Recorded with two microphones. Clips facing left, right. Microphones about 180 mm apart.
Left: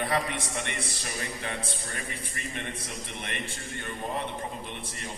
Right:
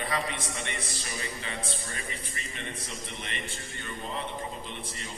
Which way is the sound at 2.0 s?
55° left (ahead or behind).